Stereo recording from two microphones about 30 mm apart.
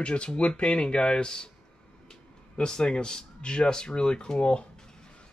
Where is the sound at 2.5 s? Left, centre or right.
Left.